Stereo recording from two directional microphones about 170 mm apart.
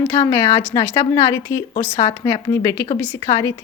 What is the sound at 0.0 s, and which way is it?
Speech, 15° left (ahead or behind).